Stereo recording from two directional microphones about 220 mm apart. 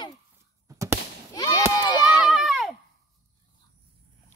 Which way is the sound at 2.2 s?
Centre (ahead or behind).